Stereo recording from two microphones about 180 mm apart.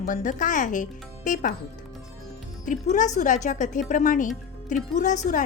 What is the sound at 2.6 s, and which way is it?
Speech, 45° left (ahead or behind).